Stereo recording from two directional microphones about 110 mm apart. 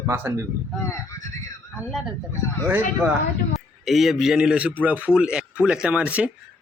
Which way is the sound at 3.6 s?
Centre (ahead or behind).